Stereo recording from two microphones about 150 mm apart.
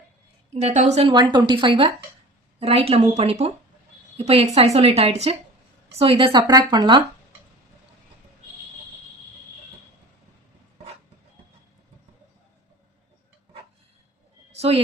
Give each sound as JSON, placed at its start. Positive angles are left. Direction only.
{"t": 0.5, "sound": "a woman's voice", "side_deg": -50}
{"t": 1.1, "sound": "a woman's voice", "side_deg": -30}
{"t": 14.5, "sound": "a sound", "side_deg": -45}